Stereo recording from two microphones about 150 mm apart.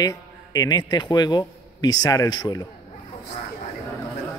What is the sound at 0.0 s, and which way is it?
A man's voice, 25° left (ahead or behind).